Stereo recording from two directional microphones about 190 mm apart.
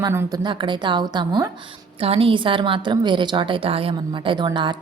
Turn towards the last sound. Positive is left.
turn(degrees=-25)  # may be behind; listen again after turning